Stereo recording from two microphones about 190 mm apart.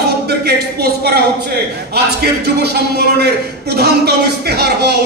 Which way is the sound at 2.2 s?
60° right (ahead or behind).